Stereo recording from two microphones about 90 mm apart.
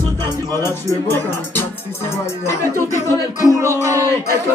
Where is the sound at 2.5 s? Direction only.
30° left (ahead or behind).